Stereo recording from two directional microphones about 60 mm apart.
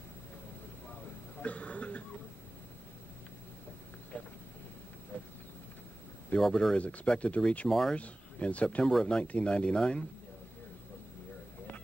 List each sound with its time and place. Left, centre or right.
1.4 s cough: left
4.1 s a sound: left
6.5 s speech: centre
7.6 s speech: centre
7.9 s speech: left